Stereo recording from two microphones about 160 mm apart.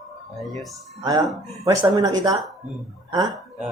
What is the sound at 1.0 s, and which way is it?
Speech, 25° right (ahead or behind).